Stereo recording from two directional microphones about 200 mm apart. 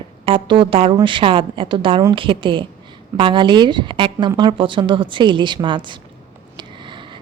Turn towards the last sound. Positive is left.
turn(degrees=-25)  # may be behind; listen again after turning